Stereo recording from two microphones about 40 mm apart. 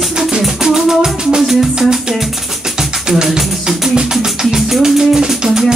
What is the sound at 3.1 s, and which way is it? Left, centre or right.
Speech, centre.